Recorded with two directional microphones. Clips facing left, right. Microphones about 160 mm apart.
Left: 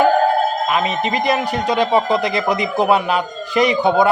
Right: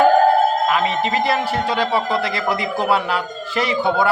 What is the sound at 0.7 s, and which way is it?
A man's voice, 20° left (ahead or behind).